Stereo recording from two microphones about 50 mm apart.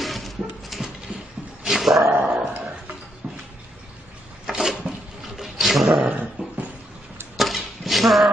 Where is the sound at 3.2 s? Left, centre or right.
Centre.